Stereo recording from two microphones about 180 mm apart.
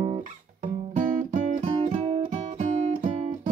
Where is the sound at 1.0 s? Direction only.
45° right (ahead or behind).